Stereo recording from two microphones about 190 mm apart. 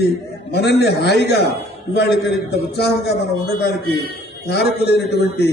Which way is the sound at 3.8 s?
55° right (ahead or behind).